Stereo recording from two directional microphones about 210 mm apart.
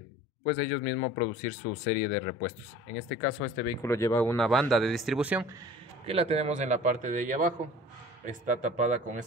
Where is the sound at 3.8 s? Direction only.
15° left (ahead or behind).